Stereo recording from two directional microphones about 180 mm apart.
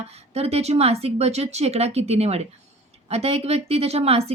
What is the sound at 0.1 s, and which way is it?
Speech, 35° right (ahead or behind).